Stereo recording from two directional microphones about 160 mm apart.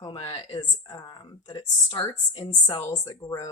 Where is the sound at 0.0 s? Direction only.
30° left (ahead or behind).